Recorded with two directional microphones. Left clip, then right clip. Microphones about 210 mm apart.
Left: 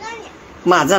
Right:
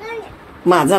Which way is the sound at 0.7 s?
10° right (ahead or behind).